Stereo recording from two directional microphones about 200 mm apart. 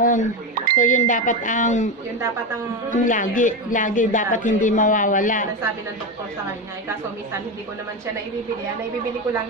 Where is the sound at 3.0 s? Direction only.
40° left (ahead or behind).